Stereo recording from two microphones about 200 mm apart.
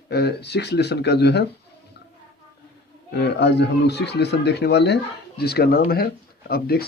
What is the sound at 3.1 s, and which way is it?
Speech, 55° left (ahead or behind).